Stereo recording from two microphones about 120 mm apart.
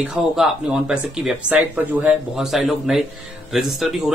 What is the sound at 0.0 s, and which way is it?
Speech, 5° right (ahead or behind).